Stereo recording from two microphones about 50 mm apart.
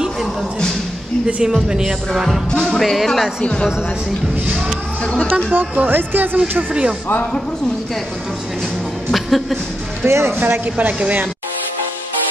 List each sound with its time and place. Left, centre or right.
0.0 s a sound: centre
1.2 s speech: centre
2.5 s music: centre
2.8 s speech: centre
5.0 s speech: centre
5.5 s speech: right
6.7 s speech: right
9.1 s a sound: centre
10.0 s speech: right
10.3 s speech: right